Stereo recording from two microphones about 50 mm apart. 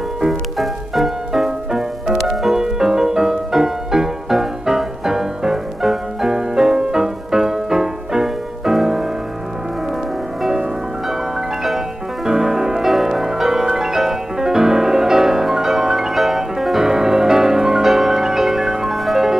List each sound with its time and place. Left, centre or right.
0.2 s music: centre
11.1 s music: centre